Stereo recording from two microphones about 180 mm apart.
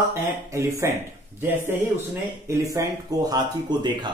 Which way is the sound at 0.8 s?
15° right (ahead or behind).